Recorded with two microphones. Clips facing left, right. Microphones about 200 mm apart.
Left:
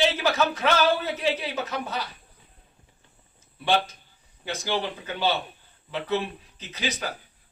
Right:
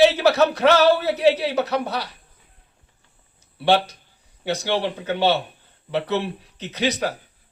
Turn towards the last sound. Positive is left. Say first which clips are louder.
# right 8 dB
turn(degrees=-70)  # may be behind; listen again after turning